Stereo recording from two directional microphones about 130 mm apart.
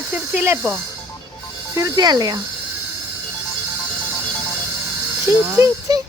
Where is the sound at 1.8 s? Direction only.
30° right (ahead or behind).